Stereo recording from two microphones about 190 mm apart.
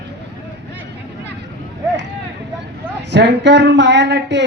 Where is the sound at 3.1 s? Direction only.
65° right (ahead or behind).